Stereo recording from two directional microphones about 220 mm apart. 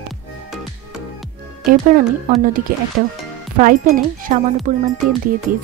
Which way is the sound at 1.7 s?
40° right (ahead or behind).